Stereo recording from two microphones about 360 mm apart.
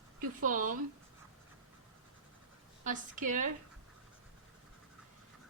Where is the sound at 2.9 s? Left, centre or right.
Right.